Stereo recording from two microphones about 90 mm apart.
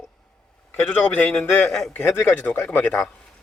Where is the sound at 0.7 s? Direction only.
20° left (ahead or behind).